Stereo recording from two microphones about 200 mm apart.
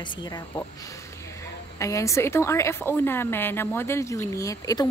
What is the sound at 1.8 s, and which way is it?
A woman's voice, 15° left (ahead or behind).